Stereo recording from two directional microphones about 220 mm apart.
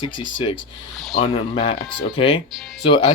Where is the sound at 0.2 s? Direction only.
20° left (ahead or behind).